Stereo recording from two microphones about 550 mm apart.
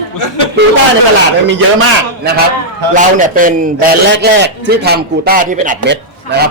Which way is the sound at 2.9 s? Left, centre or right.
Centre.